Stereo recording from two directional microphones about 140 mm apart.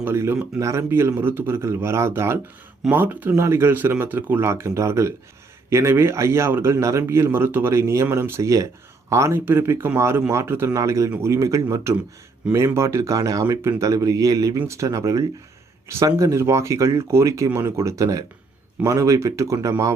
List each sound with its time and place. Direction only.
0.0 s a man's voice: 15° right (ahead or behind)